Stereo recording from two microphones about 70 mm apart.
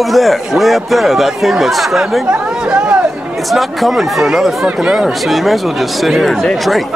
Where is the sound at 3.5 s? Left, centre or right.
Centre.